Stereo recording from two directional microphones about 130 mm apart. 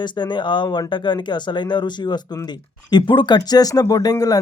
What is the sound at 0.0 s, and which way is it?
Speech, 35° left (ahead or behind).